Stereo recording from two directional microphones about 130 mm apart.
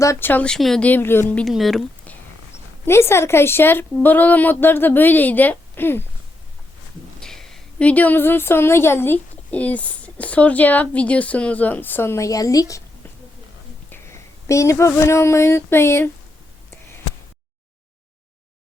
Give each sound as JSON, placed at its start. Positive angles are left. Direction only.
{"t": 0.0, "sound": "a woman's voice", "side_deg": 20}
{"t": 1.5, "sound": "speech", "side_deg": 0}
{"t": 2.8, "sound": "a woman's voice", "side_deg": 20}
{"t": 7.2, "sound": "a woman's voice", "side_deg": 5}
{"t": 13.9, "sound": "speech", "side_deg": 20}